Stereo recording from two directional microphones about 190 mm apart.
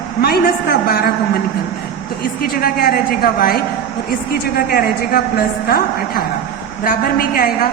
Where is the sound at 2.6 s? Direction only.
50° left (ahead or behind).